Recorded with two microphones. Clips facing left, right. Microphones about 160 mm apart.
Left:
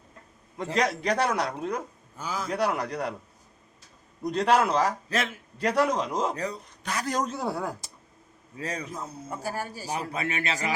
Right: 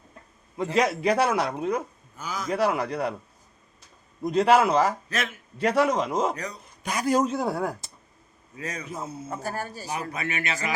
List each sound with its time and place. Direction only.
0.5 s a man's voice: 5° right (ahead or behind)
2.1 s a man's voice: 30° left (ahead or behind)
2.5 s a man's voice: 5° right (ahead or behind)
4.2 s a man's voice: 5° right (ahead or behind)
5.0 s a man's voice: 30° left (ahead or behind)
5.5 s a man's voice: 5° right (ahead or behind)
6.3 s a man's voice: 30° left (ahead or behind)
6.8 s a man's voice: 10° right (ahead or behind)
8.5 s a man's voice: 30° left (ahead or behind)
8.9 s a man's voice: 5° right (ahead or behind)
9.4 s speech: 10° left (ahead or behind)
9.9 s a man's voice: 30° left (ahead or behind)